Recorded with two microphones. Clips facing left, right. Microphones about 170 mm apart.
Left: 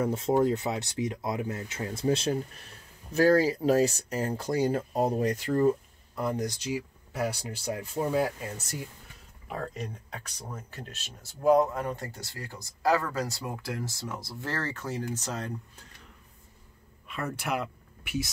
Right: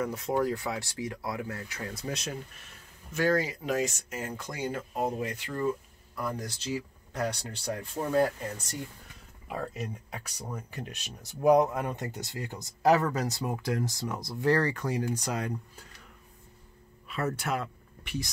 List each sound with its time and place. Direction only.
0.0 s speech: 25° left (ahead or behind)
6.1 s speech: 20° left (ahead or behind)
9.5 s speech: 5° right (ahead or behind)
17.1 s speech: centre (ahead or behind)